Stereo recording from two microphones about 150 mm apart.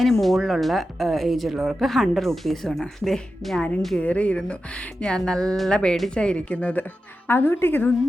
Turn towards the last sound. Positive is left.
turn(degrees=15)  # may be behind; listen again after turning